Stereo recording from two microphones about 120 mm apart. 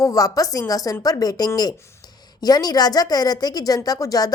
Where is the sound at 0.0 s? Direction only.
30° left (ahead or behind).